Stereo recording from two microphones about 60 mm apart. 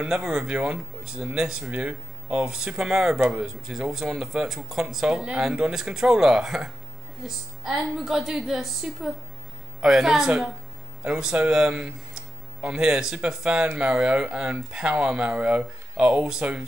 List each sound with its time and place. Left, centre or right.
0.0 s a woman's voice: centre